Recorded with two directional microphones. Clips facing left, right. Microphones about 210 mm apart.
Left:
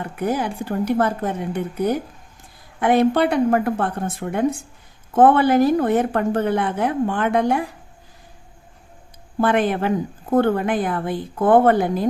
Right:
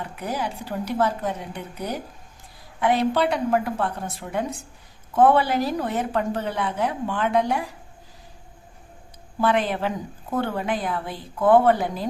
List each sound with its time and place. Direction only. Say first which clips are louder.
0.0 s a woman's voice: left 6 dB; 50° left (ahead or behind)
9.4 s a woman's voice: left 4 dB; 50° left (ahead or behind)